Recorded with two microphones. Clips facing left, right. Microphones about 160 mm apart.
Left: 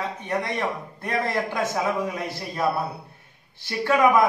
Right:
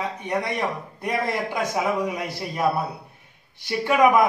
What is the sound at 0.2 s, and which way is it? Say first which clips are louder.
A man's voice: right 1 dB; 15° right (ahead or behind).